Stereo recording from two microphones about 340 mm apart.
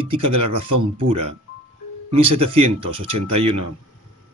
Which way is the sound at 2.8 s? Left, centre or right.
Right.